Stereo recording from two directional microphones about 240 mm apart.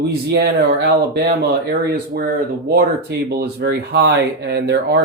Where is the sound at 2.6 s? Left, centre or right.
Right.